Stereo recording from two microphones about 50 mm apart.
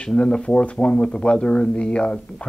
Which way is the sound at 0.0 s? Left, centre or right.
Left.